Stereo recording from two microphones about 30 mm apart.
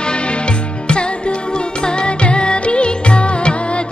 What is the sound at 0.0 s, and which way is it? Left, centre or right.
Music, left.